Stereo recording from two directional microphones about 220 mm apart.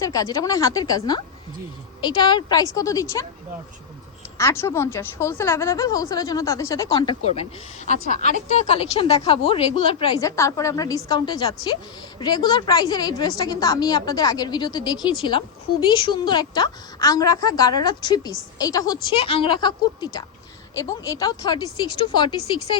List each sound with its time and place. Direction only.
0.0 s a woman's voice: 15° left (ahead or behind)
4.4 s a woman's voice: 10° left (ahead or behind)
7.9 s a woman's voice: 35° left (ahead or behind)